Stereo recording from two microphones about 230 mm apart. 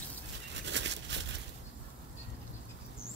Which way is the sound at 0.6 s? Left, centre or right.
Right.